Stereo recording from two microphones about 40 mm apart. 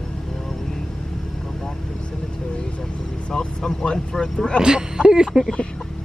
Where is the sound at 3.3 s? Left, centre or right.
Centre.